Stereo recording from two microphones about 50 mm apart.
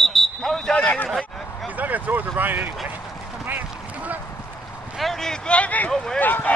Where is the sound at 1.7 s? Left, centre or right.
Right.